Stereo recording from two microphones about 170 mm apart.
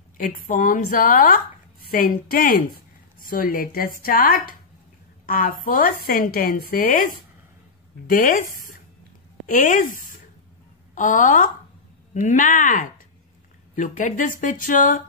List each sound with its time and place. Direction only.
0.2 s a woman's voice: 55° left (ahead or behind)
8.1 s speech: 55° left (ahead or behind)